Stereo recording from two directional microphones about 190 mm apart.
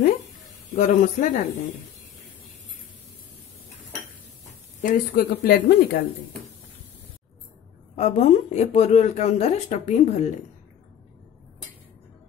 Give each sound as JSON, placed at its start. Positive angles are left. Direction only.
{"t": 0.7, "sound": "speech", "side_deg": 40}
{"t": 4.8, "sound": "speech", "side_deg": 50}
{"t": 7.9, "sound": "speech", "side_deg": 35}